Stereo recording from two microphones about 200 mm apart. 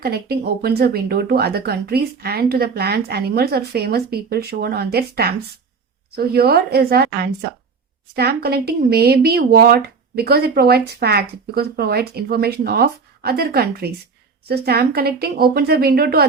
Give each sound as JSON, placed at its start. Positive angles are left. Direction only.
{"t": 0.0, "sound": "speech", "side_deg": -50}